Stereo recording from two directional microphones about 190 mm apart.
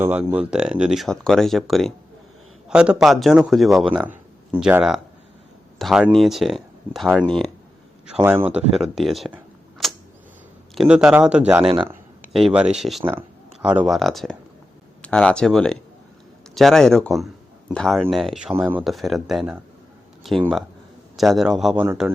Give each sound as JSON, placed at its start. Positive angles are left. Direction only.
{"t": 0.0, "sound": "speech", "side_deg": -10}
{"t": 11.6, "sound": "speech", "side_deg": -30}
{"t": 12.3, "sound": "speech", "side_deg": -5}